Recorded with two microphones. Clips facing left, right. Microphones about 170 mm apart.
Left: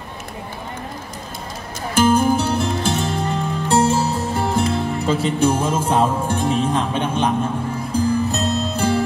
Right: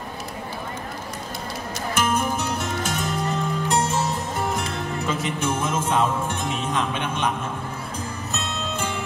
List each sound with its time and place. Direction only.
2.0 s music: 30° left (ahead or behind)